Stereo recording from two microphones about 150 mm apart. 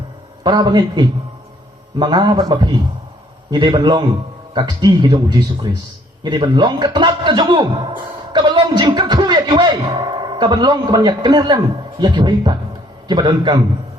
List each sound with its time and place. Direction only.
0.4 s a man's voice: 30° right (ahead or behind)